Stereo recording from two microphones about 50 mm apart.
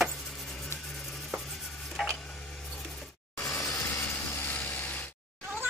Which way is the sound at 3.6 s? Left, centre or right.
Left.